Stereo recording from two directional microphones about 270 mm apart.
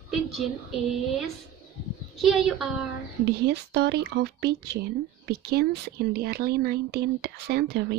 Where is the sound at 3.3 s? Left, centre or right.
Right.